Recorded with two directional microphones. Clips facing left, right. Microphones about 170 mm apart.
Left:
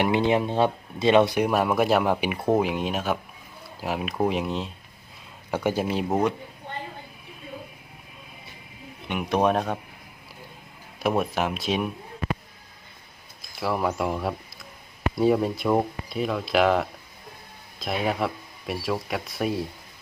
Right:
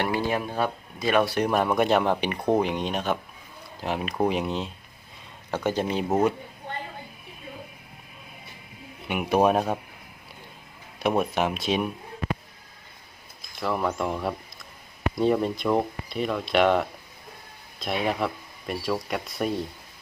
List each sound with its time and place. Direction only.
0.0 s speech: 20° left (ahead or behind)
1.4 s speech: 5° left (ahead or behind)
5.5 s speech: 10° left (ahead or behind)
9.0 s speech: 10° right (ahead or behind)
11.0 s speech: centre (ahead or behind)
13.6 s speech: 5° left (ahead or behind)